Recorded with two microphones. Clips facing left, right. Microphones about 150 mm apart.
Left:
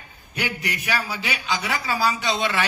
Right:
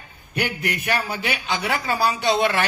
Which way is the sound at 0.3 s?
55° right (ahead or behind).